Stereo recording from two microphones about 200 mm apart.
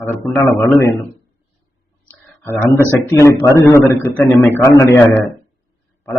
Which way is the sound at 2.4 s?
10° left (ahead or behind).